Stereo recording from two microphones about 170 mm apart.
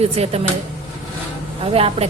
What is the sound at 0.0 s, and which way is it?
Speech, 35° right (ahead or behind).